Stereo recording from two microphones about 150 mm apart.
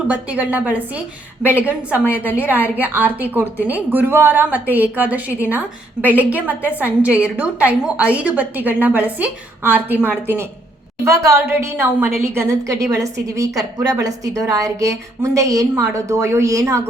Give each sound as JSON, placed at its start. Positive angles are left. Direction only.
{"t": 0.1, "sound": "a woman's voice", "side_deg": -10}